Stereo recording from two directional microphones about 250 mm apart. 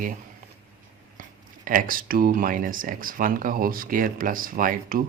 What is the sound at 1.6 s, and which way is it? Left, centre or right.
Speech, right.